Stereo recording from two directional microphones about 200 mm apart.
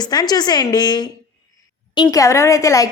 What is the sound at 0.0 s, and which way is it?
A woman's voice, 20° left (ahead or behind).